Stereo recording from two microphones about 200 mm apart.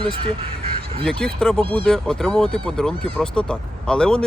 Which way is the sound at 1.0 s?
5° left (ahead or behind).